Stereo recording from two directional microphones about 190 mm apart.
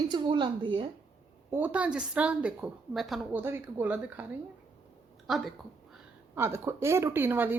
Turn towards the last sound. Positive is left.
turn(degrees=-10)  # may be behind; listen again after turning